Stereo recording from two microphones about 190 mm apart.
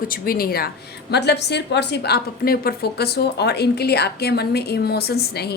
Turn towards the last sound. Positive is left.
turn(degrees=55)  # may be behind; listen again after turning